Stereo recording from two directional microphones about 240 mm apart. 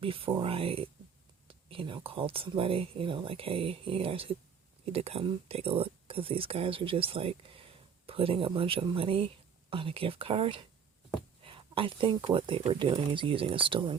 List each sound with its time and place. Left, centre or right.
0.0 s speech: right